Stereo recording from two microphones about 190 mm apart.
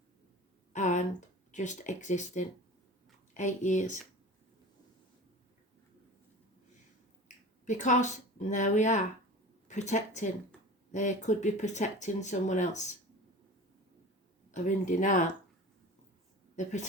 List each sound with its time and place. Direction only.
0.7 s a sound: 40° left (ahead or behind)
1.5 s speech: 40° left (ahead or behind)
7.6 s speech: 40° left (ahead or behind)
14.5 s speech: 40° left (ahead or behind)